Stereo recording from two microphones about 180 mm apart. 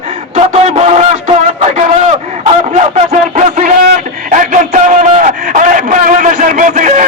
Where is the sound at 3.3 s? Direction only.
45° right (ahead or behind).